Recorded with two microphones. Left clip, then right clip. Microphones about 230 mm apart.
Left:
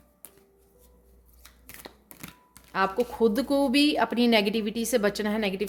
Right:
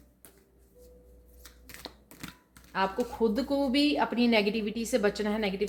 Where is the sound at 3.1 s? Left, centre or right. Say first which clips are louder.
Left 5 dB; left.